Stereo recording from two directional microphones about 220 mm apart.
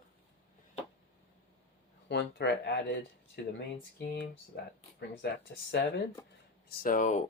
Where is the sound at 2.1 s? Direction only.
50° left (ahead or behind).